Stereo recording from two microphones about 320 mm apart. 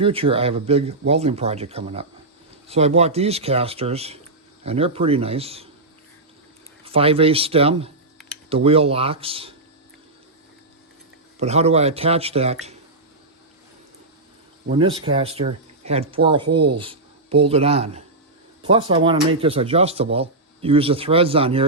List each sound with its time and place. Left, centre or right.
0.0 s speech: centre
6.8 s speech: centre
11.3 s speech: centre
14.7 s speech: centre